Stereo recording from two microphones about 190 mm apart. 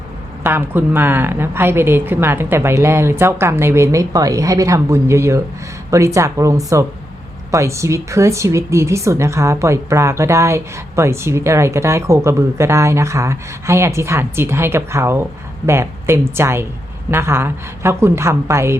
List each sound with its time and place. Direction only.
0.4 s speech: 10° right (ahead or behind)